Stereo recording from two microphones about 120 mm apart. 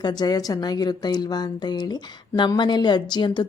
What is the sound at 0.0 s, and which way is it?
A woman's voice, 35° left (ahead or behind).